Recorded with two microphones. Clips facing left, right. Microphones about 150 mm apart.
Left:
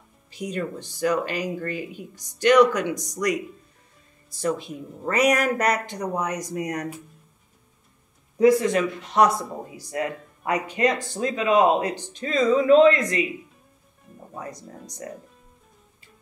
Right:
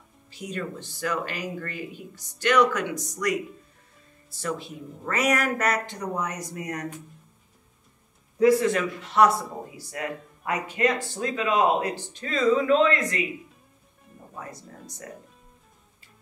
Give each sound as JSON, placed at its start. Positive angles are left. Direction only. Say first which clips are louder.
{"t": 0.3, "sound": "speech", "louder": "left 4 dB", "side_deg": 15}
{"t": 4.4, "sound": "speech", "louder": "left 5 dB", "side_deg": 15}
{"t": 8.4, "sound": "speech", "louder": "left 2 dB", "side_deg": 20}